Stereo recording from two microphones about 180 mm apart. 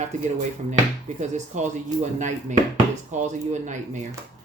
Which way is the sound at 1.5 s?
40° right (ahead or behind).